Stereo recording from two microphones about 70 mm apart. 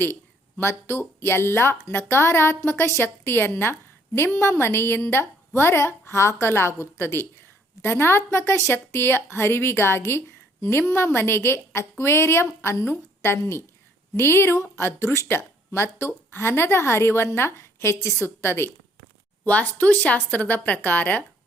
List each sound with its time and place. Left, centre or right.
0.0 s a woman's voice: left
19.5 s speech: left